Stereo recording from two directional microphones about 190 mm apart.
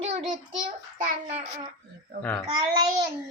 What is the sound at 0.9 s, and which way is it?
Speech, 40° right (ahead or behind).